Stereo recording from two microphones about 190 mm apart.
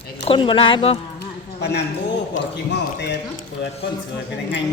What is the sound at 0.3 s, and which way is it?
Speech, 25° left (ahead or behind).